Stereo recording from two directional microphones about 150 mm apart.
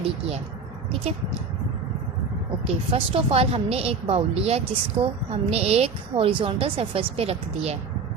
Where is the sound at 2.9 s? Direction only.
40° right (ahead or behind).